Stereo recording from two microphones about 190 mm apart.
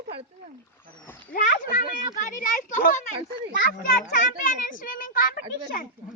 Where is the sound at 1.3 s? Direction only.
45° left (ahead or behind).